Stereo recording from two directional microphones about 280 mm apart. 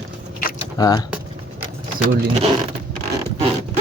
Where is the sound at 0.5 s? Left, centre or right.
Centre.